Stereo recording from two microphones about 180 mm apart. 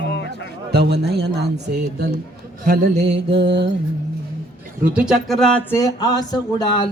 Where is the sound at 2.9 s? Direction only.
35° right (ahead or behind).